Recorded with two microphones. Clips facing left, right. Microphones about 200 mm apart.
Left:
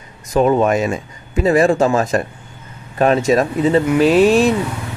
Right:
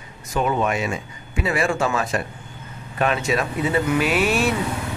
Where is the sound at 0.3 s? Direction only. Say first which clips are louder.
Left 8 dB; 40° left (ahead or behind).